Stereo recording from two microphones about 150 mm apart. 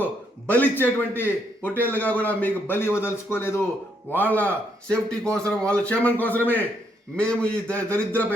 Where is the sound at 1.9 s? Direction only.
10° left (ahead or behind).